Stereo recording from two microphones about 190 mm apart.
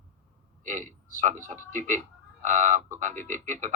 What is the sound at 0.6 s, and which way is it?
Speech, 45° right (ahead or behind).